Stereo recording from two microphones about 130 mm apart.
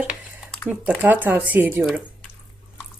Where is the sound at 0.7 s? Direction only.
15° right (ahead or behind).